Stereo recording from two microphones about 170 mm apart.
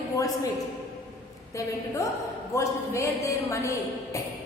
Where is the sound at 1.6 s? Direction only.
20° left (ahead or behind).